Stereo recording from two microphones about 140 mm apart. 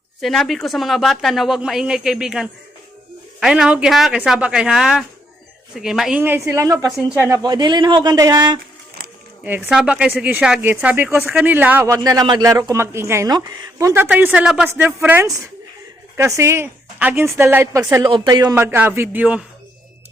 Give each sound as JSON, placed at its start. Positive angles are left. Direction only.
{"t": 0.2, "sound": "speech", "side_deg": 0}
{"t": 6.2, "sound": "speech", "side_deg": -15}
{"t": 9.4, "sound": "speech", "side_deg": -10}
{"t": 11.9, "sound": "speech", "side_deg": -30}
{"t": 18.0, "sound": "speech", "side_deg": -30}
{"t": 18.5, "sound": "speech", "side_deg": -15}